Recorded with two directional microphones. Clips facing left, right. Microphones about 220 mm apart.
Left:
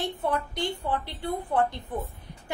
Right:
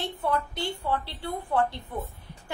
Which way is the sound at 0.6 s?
20° left (ahead or behind).